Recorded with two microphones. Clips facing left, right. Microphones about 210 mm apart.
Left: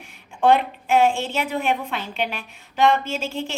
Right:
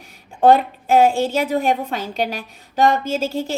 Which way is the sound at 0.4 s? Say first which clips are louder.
Right 4 dB; 40° right (ahead or behind).